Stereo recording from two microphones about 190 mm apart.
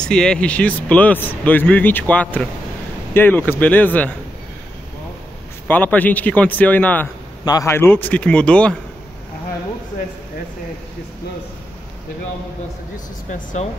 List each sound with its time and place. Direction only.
0.0 s speech: 5° left (ahead or behind)
5.7 s speech: 10° left (ahead or behind)
13.3 s speech: 40° left (ahead or behind)